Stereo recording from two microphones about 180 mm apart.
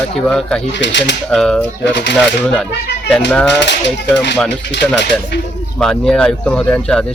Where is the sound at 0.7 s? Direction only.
80° left.